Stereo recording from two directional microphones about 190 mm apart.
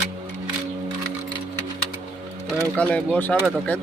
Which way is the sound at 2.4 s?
5° left (ahead or behind).